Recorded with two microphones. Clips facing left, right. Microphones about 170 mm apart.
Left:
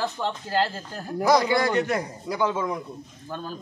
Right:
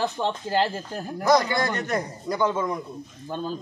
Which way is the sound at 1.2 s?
10° left (ahead or behind).